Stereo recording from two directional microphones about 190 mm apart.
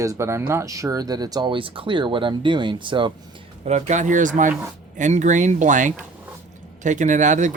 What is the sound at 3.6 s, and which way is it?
Speech, 35° right (ahead or behind).